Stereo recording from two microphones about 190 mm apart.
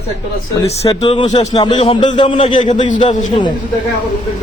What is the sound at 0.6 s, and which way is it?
Speech, 15° left (ahead or behind).